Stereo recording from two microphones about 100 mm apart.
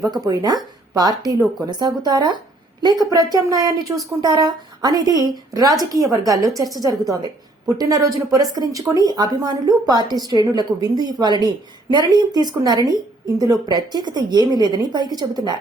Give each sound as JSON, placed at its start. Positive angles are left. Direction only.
{"t": 0.3, "sound": "a woman's voice", "side_deg": -40}